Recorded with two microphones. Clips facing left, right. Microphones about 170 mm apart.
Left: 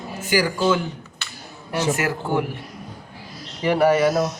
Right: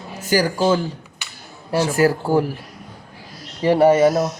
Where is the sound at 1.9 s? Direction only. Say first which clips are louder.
Right 6 dB; 35° right (ahead or behind).